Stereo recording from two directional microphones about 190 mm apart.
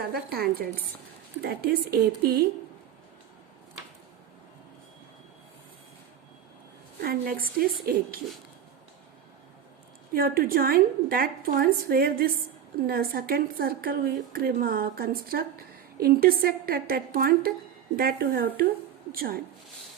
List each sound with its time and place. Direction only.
0.1 s a woman's voice: 55° right (ahead or behind)
7.0 s a woman's voice: 50° right (ahead or behind)
10.2 s a woman's voice: 50° right (ahead or behind)